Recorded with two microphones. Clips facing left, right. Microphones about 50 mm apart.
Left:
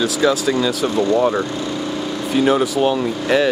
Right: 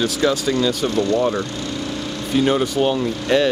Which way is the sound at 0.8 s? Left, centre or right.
Centre.